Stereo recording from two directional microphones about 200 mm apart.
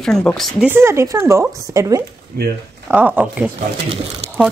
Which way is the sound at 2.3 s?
50° right (ahead or behind).